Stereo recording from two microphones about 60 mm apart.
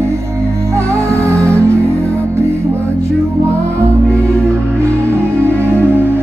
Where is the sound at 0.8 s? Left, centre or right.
Right.